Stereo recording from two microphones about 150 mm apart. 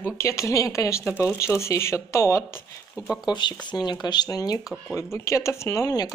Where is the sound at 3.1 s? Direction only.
30° left (ahead or behind).